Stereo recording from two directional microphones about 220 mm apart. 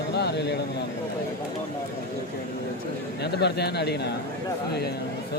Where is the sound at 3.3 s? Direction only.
50° left (ahead or behind).